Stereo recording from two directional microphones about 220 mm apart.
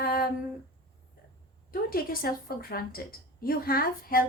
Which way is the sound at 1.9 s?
40° left (ahead or behind).